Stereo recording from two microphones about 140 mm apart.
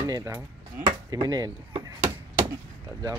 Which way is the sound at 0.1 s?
25° right (ahead or behind).